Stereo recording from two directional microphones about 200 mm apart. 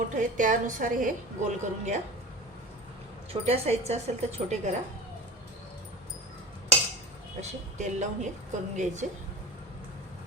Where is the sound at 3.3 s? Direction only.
30° right (ahead or behind).